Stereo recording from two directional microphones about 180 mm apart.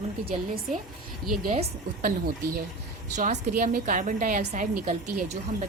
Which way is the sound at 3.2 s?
50° right (ahead or behind).